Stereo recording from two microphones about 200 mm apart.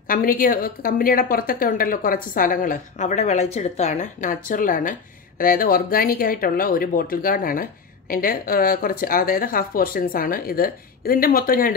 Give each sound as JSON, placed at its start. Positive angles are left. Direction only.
{"t": 0.1, "sound": "speech", "side_deg": 45}